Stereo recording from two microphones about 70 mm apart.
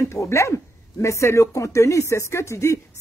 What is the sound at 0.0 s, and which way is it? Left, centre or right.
Speech, left.